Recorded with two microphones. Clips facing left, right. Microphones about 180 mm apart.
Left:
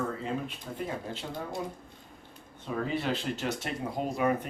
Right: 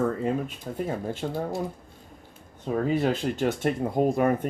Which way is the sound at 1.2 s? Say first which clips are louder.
Right 8 dB; 55° right (ahead or behind).